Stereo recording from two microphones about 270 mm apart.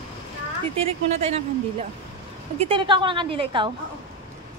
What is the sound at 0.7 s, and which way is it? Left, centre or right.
A woman's voice, right.